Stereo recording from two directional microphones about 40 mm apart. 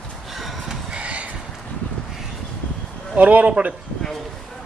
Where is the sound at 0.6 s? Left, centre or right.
Right.